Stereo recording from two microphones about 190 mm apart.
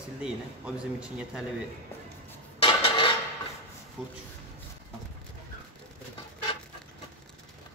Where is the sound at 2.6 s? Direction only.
30° left (ahead or behind).